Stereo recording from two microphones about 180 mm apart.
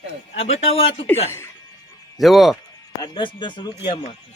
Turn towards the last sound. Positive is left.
turn(degrees=25)  # may be behind; listen again after turning